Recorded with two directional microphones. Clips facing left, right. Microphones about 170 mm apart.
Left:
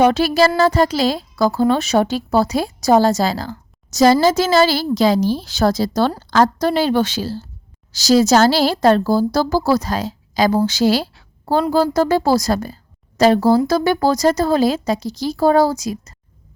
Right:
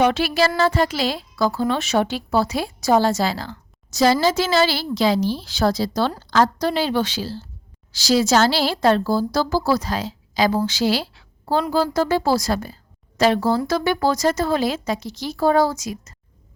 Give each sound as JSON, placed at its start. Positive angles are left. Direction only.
{"t": 0.0, "sound": "a woman's voice", "side_deg": 40}
{"t": 10.7, "sound": "a sound", "side_deg": 45}
{"t": 11.7, "sound": "a woman's voice", "side_deg": 45}